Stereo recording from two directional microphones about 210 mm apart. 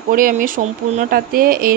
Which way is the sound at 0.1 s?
40° right (ahead or behind).